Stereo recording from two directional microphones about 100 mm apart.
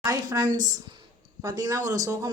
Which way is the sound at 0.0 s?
40° right (ahead or behind).